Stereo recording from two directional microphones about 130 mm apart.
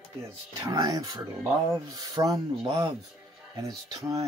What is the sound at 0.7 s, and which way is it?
Speech, 30° right (ahead or behind).